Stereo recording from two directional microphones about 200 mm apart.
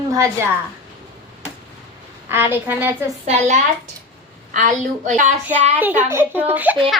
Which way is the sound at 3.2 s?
35° right (ahead or behind).